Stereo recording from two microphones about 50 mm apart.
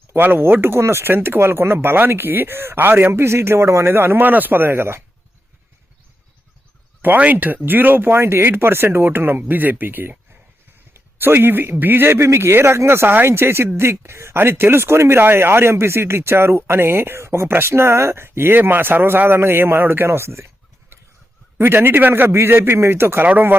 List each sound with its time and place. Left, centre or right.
0.2 s speech: right
3.1 s speech: right
3.9 s speech: right
7.2 s speech: right
11.2 s speech: right
12.2 s speech: right
14.3 s speech: right
20.1 s speech: right
21.6 s speech: right